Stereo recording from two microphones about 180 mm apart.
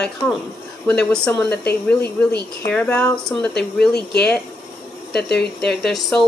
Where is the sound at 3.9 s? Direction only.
65° left (ahead or behind).